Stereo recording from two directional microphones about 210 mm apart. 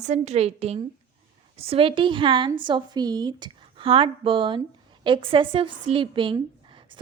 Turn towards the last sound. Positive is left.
turn(degrees=-25)  # may be behind; listen again after turning